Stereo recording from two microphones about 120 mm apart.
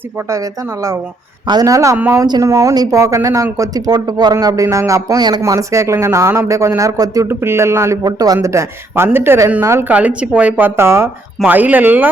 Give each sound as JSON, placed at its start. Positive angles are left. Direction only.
{"t": 0.3, "sound": "a woman's voice", "side_deg": -25}
{"t": 10.8, "sound": "a woman's voice", "side_deg": -20}